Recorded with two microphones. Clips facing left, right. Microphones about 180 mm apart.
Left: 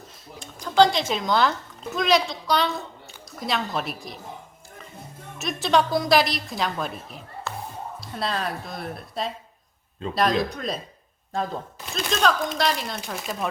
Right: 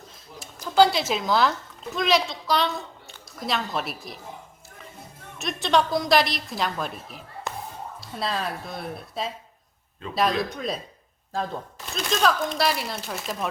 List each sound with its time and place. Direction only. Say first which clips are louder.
0.8 s speech: even; 5° right (ahead or behind)
5.4 s speech: left 1 dB; centre (ahead or behind)
7.5 s music: even; 15° right (ahead or behind)
8.0 s speech: left 1 dB; centre (ahead or behind)
10.5 s speech: even; centre (ahead or behind)